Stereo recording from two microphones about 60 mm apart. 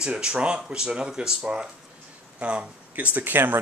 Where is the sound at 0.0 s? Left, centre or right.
Centre.